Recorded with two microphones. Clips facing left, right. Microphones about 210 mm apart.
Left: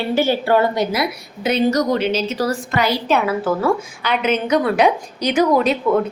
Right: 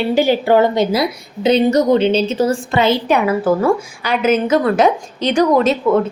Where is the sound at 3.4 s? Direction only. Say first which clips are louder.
Right 4 dB; 10° right (ahead or behind).